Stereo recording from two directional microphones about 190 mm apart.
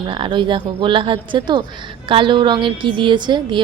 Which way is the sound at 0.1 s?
25° right (ahead or behind).